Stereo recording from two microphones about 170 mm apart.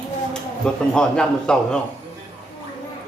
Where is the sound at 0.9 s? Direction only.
5° left (ahead or behind).